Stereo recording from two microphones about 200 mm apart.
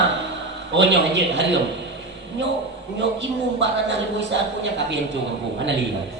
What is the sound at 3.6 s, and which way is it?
A man's voice, 65° right (ahead or behind).